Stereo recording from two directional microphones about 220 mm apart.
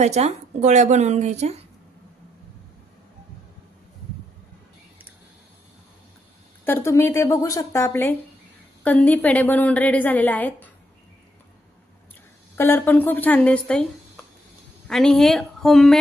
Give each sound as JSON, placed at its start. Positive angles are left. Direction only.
{"t": 0.0, "sound": "speech", "side_deg": -30}
{"t": 6.6, "sound": "a woman's voice", "side_deg": 10}
{"t": 12.5, "sound": "a woman's voice", "side_deg": 10}
{"t": 14.9, "sound": "a woman's voice", "side_deg": 0}